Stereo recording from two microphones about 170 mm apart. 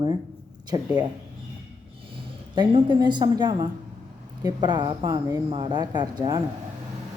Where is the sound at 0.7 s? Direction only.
25° right (ahead or behind).